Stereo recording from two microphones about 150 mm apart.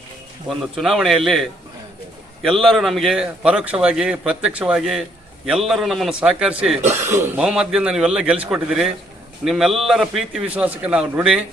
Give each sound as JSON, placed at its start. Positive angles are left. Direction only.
{"t": 0.4, "sound": "a man's voice", "side_deg": 0}
{"t": 7.3, "sound": "a man's voice", "side_deg": -5}